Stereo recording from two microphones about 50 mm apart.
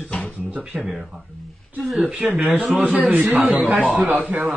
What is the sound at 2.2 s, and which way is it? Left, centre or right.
Speech, right.